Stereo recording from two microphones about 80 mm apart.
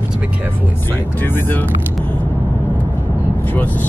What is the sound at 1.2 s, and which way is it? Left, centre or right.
Speech, left.